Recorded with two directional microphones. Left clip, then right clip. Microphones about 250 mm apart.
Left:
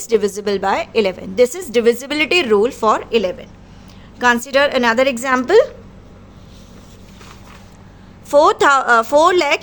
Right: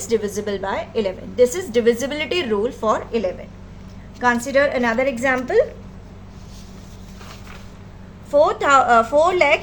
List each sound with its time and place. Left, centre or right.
0.0 s a woman's voice: left
8.3 s speech: left